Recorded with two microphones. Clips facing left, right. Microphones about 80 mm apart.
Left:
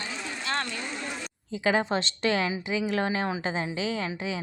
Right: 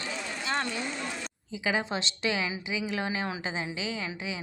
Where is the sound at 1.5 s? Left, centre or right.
Left.